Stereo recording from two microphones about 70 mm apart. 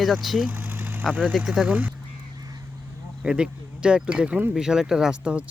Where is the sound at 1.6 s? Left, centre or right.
Right.